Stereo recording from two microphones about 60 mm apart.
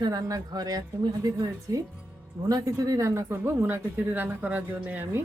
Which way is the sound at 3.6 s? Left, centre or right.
Right.